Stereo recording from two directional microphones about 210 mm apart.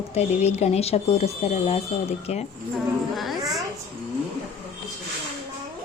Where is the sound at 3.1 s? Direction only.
Centre (ahead or behind).